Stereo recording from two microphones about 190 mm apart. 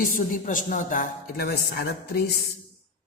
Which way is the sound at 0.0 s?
45° left (ahead or behind).